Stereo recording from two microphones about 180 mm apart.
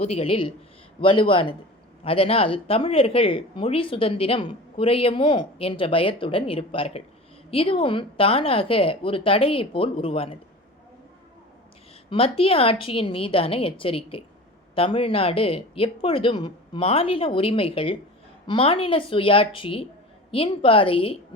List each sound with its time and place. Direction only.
0.0 s speech: 35° left (ahead or behind)
12.1 s speech: 30° left (ahead or behind)